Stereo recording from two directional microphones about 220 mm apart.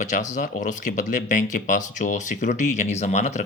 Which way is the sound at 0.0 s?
35° left (ahead or behind).